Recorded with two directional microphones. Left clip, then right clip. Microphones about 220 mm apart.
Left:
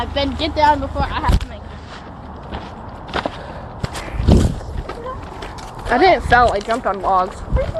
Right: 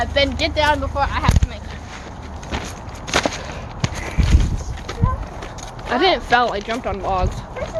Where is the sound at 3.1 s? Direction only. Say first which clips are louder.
Right 4 dB; 60° right (ahead or behind).